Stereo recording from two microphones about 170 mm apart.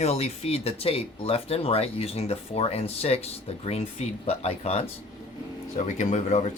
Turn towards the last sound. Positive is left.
turn(degrees=40)  # may be behind; listen again after turning